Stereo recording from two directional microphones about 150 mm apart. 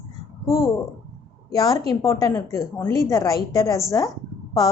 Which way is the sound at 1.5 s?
25° left (ahead or behind).